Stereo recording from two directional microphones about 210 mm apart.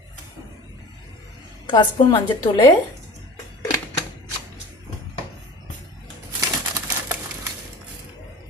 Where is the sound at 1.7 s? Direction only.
20° left (ahead or behind).